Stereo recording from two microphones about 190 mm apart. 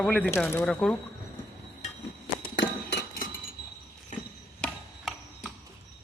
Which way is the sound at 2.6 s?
60° left (ahead or behind).